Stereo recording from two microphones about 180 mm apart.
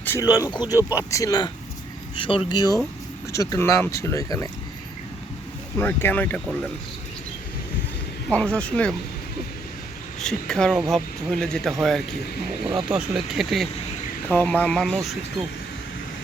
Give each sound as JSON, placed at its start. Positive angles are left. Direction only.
{"t": 0.0, "sound": "speech", "side_deg": 15}
{"t": 5.8, "sound": "speech", "side_deg": 10}
{"t": 8.3, "sound": "speech", "side_deg": 5}
{"t": 10.2, "sound": "speech", "side_deg": 5}